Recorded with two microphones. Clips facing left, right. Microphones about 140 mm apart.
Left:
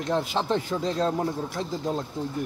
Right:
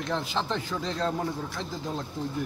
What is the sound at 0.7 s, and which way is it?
Speech, 25° left (ahead or behind).